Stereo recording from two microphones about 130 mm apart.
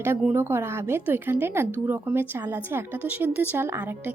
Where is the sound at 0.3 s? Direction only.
20° right (ahead or behind).